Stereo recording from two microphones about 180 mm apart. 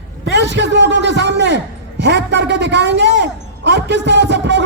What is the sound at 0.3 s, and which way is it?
A man's voice, 75° right (ahead or behind).